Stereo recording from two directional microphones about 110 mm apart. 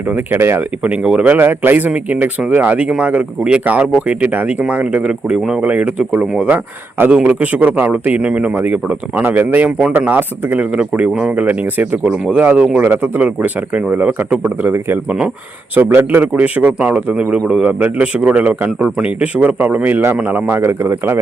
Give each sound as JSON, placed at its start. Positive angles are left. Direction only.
{"t": 0.1, "sound": "speech", "side_deg": -20}
{"t": 0.8, "sound": "a man's voice", "side_deg": -10}